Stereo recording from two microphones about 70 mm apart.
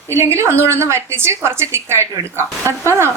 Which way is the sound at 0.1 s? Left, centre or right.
Right.